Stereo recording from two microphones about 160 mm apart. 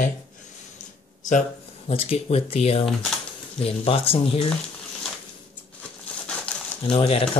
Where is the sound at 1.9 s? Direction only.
40° left (ahead or behind).